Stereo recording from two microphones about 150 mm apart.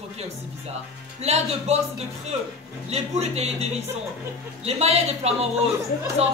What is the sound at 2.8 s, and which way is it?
Speech, 45° right (ahead or behind).